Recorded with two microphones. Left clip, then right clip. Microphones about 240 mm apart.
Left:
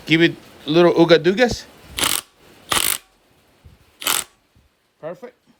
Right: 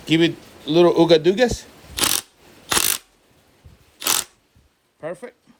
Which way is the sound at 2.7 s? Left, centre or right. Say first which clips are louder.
Left 1 dB; centre.